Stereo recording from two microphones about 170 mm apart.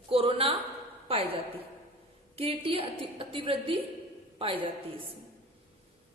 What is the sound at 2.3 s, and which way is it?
A woman's voice, 35° right (ahead or behind).